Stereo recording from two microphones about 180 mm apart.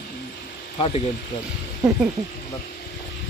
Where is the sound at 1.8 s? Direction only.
20° right (ahead or behind).